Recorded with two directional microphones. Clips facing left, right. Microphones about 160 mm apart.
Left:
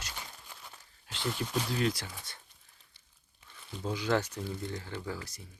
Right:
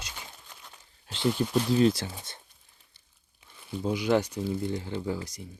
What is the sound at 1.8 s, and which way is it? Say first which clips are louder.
Speech: right 8 dB; 25° right (ahead or behind).